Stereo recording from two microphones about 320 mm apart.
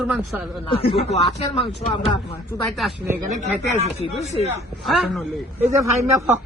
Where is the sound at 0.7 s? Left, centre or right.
Centre.